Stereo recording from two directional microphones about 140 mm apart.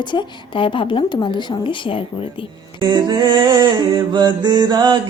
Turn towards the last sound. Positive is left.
turn(degrees=-30)  # may be behind; listen again after turning